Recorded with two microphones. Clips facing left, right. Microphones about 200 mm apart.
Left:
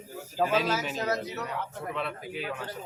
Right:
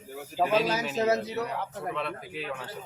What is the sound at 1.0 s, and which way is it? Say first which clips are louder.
Speech: right 5 dB; 30° right (ahead or behind).